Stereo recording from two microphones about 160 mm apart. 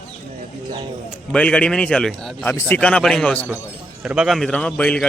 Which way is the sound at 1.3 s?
5° left (ahead or behind).